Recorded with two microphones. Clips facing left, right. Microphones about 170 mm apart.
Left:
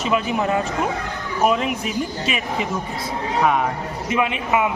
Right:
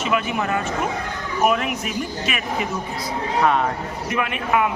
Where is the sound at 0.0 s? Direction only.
30° left (ahead or behind).